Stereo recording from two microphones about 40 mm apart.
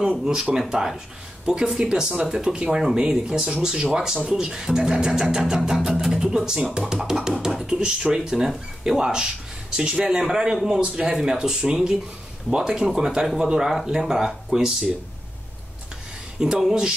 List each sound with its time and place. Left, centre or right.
0.2 s speech: centre
2.5 s speech: right
10.0 s speech: centre
10.8 s speech: right
11.1 s speech: centre
16.3 s speech: centre